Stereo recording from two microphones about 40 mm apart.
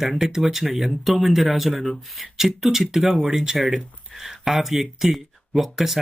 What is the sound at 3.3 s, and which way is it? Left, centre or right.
Speech, centre.